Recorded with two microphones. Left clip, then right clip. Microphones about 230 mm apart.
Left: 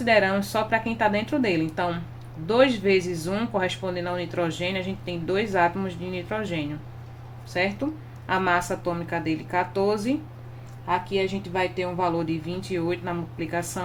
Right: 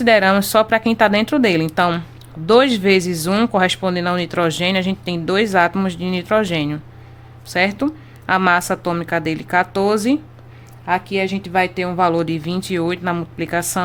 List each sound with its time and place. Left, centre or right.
0.0 s speech: right